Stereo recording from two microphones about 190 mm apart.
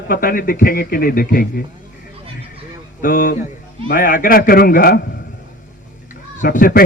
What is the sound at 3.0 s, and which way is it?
A man's voice, 45° left (ahead or behind).